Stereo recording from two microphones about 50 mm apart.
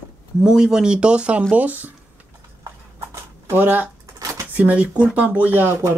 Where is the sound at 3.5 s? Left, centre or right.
Right.